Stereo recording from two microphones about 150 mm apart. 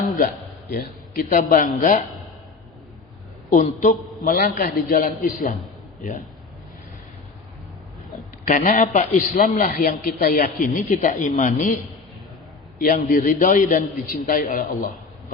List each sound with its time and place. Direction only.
0.7 s a man's voice: 75° left (ahead or behind)
3.5 s a man's voice: 55° left (ahead or behind)
8.4 s a man's voice: 65° left (ahead or behind)
12.8 s a man's voice: 65° left (ahead or behind)